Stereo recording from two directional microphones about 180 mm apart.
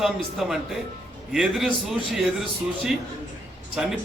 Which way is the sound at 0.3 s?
Centre (ahead or behind).